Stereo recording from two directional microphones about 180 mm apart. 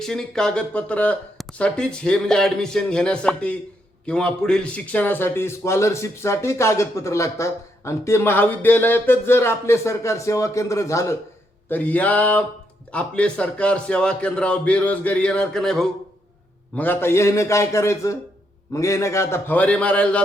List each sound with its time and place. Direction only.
0.0 s a man's voice: 5° left (ahead or behind)